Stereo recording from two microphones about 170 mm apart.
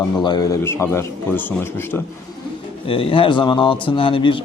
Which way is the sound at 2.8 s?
35° left (ahead or behind).